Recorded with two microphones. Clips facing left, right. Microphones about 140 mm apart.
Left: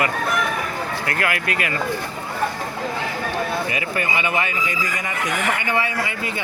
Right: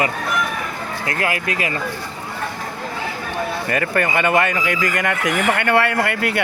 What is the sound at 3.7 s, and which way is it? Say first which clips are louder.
Speech: right 5 dB; 55° right (ahead or behind).